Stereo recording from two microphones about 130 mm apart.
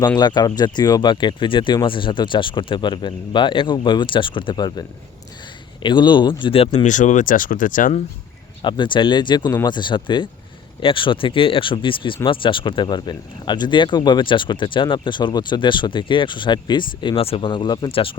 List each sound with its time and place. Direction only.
0.2 s speech: 30° left (ahead or behind); by 6.7 s 45° left (ahead or behind)
6.8 s speech: 70° left (ahead or behind); by 7.9 s 90° left
8.6 s speech: 35° left (ahead or behind)